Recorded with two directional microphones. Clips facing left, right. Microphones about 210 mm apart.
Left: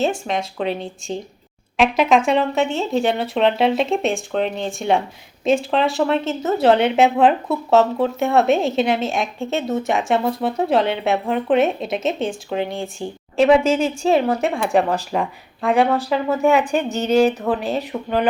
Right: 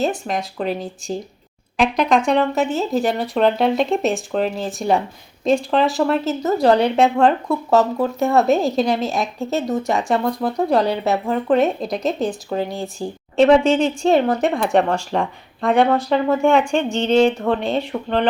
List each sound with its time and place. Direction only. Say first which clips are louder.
0.0 s speech: even; centre (ahead or behind)